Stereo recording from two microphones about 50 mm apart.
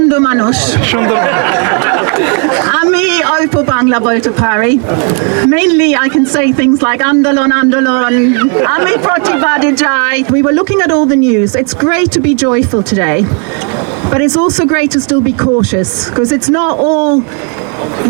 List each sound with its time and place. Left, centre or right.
0.1 s speech: right
14.3 s speech: centre
14.6 s speech: right
15.1 s speech: right
16.2 s speech: centre
16.6 s speech: right